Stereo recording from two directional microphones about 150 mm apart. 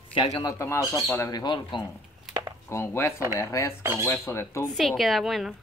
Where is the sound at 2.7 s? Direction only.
15° left (ahead or behind).